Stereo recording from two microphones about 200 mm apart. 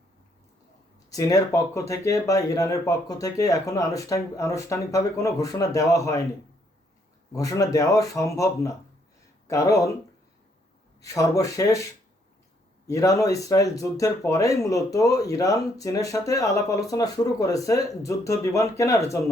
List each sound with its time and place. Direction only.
1.1 s speech: 15° left (ahead or behind)
7.3 s speech: 15° left (ahead or behind)
11.0 s speech: 15° left (ahead or behind)
12.9 s speech: 15° left (ahead or behind)